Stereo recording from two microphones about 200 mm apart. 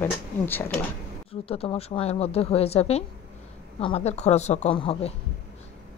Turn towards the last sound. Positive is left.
turn(degrees=25)  # may be behind; listen again after turning